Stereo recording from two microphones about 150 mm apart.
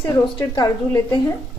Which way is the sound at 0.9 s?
20° left (ahead or behind).